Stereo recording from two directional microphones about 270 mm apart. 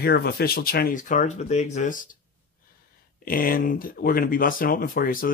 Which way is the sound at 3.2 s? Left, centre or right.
Left.